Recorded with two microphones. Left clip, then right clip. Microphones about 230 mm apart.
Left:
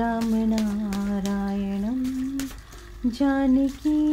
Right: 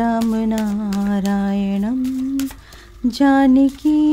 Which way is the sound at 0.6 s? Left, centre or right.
Right.